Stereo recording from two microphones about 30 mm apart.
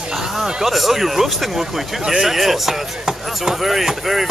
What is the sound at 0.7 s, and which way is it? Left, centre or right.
Speech, centre.